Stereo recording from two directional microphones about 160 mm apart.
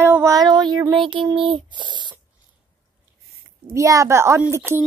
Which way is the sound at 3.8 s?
20° right (ahead or behind).